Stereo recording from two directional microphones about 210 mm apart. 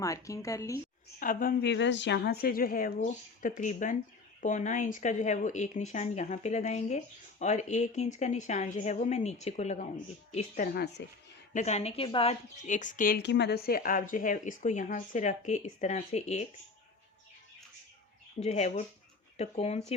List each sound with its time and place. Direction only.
0.0 s a woman's voice: 15° left (ahead or behind)
1.2 s a woman's voice: 40° left (ahead or behind)
11.5 s speech: 30° left (ahead or behind)
18.4 s speech: 30° left (ahead or behind)